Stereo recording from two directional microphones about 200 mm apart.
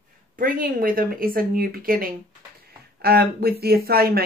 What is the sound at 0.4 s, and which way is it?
Speech, 45° right (ahead or behind).